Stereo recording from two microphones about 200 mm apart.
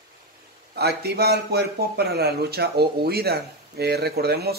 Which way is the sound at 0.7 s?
55° right (ahead or behind).